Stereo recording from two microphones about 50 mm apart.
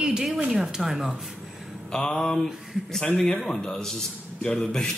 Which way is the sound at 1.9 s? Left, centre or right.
Centre.